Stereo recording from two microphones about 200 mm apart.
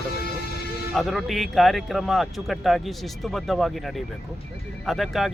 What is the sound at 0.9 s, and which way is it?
Speech, centre (ahead or behind).